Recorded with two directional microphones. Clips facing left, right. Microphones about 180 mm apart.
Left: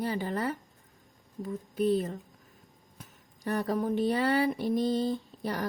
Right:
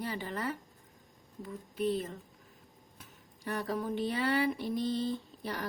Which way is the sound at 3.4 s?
45° left (ahead or behind).